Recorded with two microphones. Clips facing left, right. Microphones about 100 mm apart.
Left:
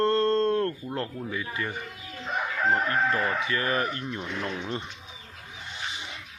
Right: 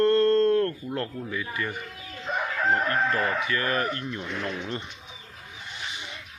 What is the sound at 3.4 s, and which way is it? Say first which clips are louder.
Speech: right 1 dB; 25° left (ahead or behind).